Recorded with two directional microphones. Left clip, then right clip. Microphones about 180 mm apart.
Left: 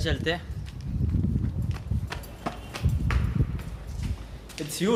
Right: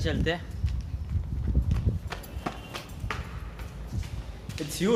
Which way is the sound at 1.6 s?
15° left (ahead or behind).